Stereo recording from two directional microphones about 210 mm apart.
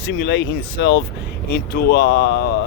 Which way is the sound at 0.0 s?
55° left (ahead or behind).